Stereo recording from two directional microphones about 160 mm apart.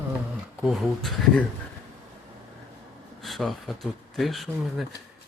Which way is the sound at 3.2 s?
Centre (ahead or behind).